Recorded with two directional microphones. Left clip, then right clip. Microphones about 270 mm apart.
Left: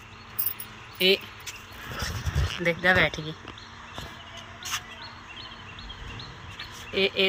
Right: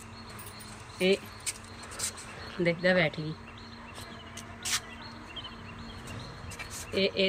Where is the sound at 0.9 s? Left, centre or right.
Centre.